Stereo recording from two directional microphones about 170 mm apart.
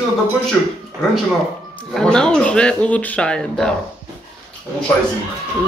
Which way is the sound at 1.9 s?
5° left (ahead or behind).